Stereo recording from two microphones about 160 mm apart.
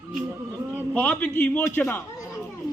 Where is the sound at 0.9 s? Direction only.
10° left (ahead or behind).